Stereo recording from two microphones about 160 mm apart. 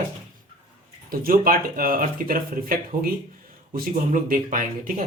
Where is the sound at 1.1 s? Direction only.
65° right (ahead or behind).